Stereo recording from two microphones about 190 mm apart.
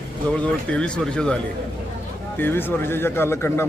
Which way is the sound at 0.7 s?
5° left (ahead or behind).